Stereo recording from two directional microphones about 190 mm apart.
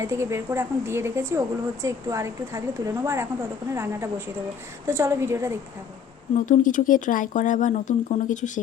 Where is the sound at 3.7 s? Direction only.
15° right (ahead or behind).